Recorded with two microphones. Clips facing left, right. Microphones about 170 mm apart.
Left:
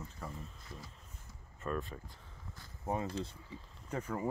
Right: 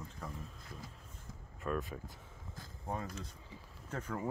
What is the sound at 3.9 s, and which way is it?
Speech, 10° left (ahead or behind).